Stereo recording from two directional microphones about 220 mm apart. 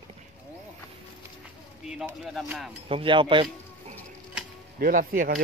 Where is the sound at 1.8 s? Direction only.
5° right (ahead or behind).